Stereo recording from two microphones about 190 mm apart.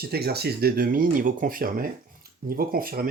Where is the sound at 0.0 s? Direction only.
55° right (ahead or behind).